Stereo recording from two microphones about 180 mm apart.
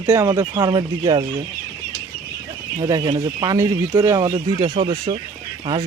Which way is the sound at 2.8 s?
20° right (ahead or behind).